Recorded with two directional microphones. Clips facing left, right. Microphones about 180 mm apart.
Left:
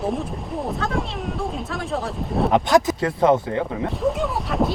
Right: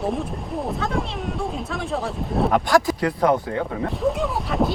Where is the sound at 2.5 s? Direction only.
20° left (ahead or behind).